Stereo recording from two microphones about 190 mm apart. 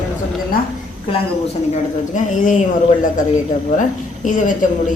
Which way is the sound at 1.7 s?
40° left (ahead or behind).